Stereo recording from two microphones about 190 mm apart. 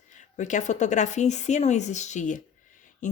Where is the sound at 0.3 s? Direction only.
40° left (ahead or behind).